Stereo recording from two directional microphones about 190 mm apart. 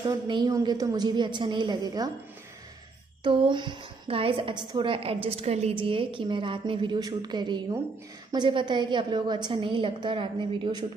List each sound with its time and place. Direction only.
0.0 s a woman's voice: 25° right (ahead or behind)
3.3 s a woman's voice: 25° right (ahead or behind)